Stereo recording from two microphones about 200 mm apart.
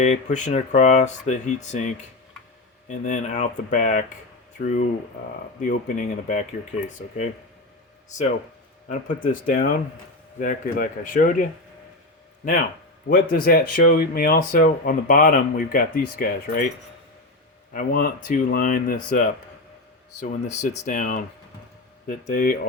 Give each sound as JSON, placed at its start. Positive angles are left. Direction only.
{"t": 0.0, "sound": "speech", "side_deg": 35}
{"t": 8.9, "sound": "speech", "side_deg": 40}
{"t": 13.1, "sound": "speech", "side_deg": 50}
{"t": 17.7, "sound": "speech", "side_deg": 40}